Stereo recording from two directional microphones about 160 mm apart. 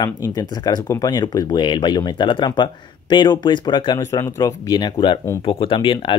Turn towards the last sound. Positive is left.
turn(degrees=30)  # may be behind; listen again after turning